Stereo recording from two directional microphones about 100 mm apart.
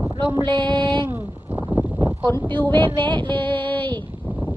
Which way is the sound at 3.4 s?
55° right (ahead or behind).